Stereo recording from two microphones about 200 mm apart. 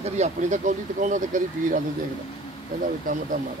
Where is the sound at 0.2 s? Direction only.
40° right (ahead or behind).